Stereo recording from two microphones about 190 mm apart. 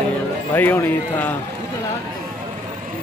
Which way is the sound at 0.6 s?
10° left (ahead or behind).